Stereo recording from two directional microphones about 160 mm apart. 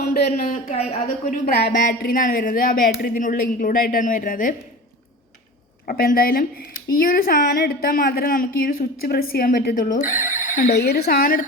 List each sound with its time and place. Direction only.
0.0 s speech: 75° left (ahead or behind); by 4.5 s 60° left (ahead or behind)
5.9 s speech: 65° left (ahead or behind); by 10.7 s 50° left (ahead or behind)
10.7 s a woman's voice: 90° left; by 11.4 s 65° left (ahead or behind)